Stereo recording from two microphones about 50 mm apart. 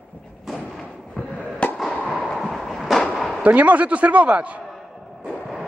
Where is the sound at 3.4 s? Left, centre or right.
Right.